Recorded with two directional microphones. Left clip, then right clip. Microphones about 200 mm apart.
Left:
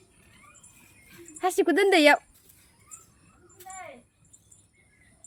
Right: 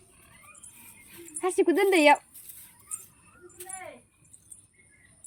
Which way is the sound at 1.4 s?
35° left (ahead or behind).